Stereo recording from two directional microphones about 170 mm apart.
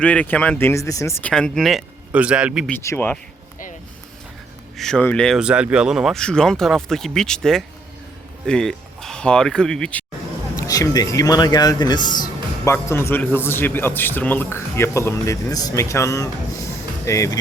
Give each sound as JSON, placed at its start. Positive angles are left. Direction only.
{"t": 0.0, "sound": "a man's voice", "side_deg": 5}
{"t": 1.2, "sound": "speech", "side_deg": 5}
{"t": 2.6, "sound": "a man's voice", "side_deg": 10}
{"t": 4.8, "sound": "speech", "side_deg": 5}
{"t": 10.6, "sound": "a man's voice", "side_deg": 20}